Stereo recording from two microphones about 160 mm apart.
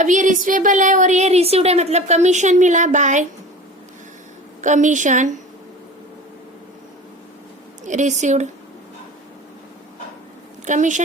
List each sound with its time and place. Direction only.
0.0 s a woman's voice: 50° right (ahead or behind)
4.6 s a woman's voice: 50° right (ahead or behind)
7.9 s a woman's voice: 50° right (ahead or behind)
10.7 s a woman's voice: 50° right (ahead or behind)